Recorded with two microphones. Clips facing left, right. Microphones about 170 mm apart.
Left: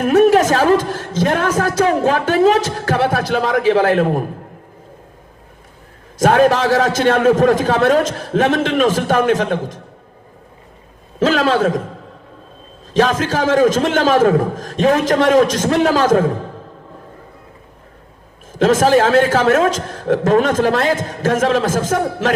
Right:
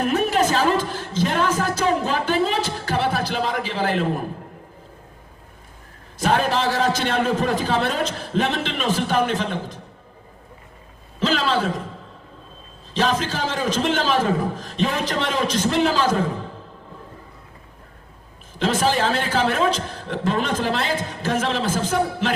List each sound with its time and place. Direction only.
0.0 s a woman's voice: 50° left (ahead or behind)
6.2 s a man's voice: 50° left (ahead or behind)
11.2 s a man's voice: 50° left (ahead or behind)
12.9 s a man's voice: 50° left (ahead or behind)
18.6 s a man's voice: 45° left (ahead or behind)